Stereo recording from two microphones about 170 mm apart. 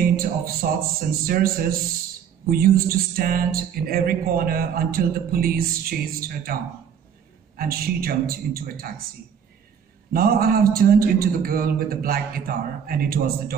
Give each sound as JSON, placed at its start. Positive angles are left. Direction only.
{"t": 0.1, "sound": "music", "side_deg": -60}
{"t": 10.1, "sound": "music", "side_deg": -60}